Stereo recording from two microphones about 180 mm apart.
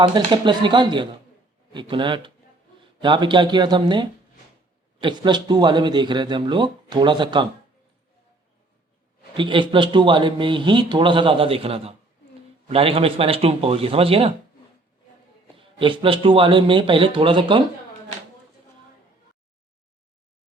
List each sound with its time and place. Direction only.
0.3 s a man's voice: 25° right (ahead or behind)
9.3 s a man's voice: 25° right (ahead or behind)
15.5 s a man's voice: 30° right (ahead or behind)